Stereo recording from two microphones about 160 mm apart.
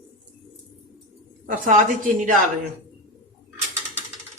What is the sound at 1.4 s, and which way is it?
Speech, 55° right (ahead or behind).